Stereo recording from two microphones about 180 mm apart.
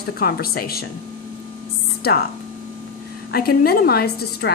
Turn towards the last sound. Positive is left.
turn(degrees=60)  # may be behind; listen again after turning